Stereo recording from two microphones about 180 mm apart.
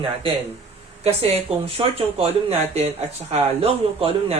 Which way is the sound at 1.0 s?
35° right (ahead or behind).